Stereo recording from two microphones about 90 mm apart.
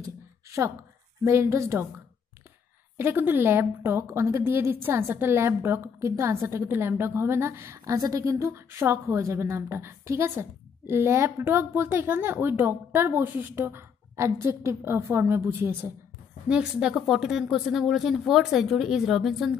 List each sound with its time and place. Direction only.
1.2 s a woman's voice: 30° right (ahead or behind)
3.0 s a woman's voice: 25° right (ahead or behind)
7.8 s a woman's voice: 40° right (ahead or behind)
8.4 s a woman's voice: 25° right (ahead or behind)
16.4 s speech: 10° right (ahead or behind)